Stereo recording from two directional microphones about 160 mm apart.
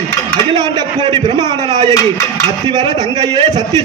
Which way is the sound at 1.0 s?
25° right (ahead or behind).